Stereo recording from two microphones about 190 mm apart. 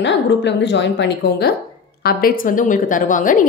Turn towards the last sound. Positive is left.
turn(degrees=45)  # may be behind; listen again after turning